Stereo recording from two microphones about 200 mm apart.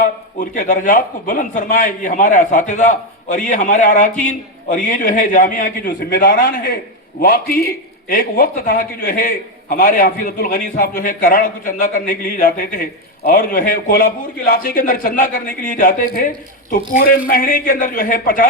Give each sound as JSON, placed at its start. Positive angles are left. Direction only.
{"t": 0.0, "sound": "a man's voice", "side_deg": 40}